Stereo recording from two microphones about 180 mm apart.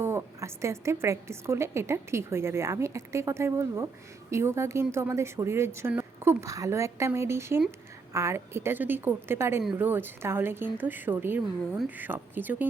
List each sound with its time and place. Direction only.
0.0 s a woman's voice: 15° right (ahead or behind)